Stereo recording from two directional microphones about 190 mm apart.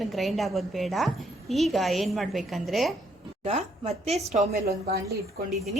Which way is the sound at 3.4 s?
35° right (ahead or behind).